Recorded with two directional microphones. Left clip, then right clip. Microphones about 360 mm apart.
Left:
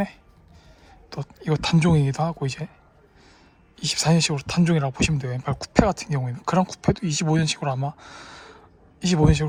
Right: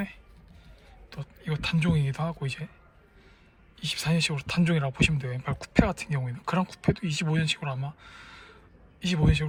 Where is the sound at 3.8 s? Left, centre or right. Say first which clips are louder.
Left 6 dB; centre.